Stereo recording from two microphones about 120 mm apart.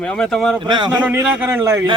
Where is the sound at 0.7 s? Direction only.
40° right (ahead or behind).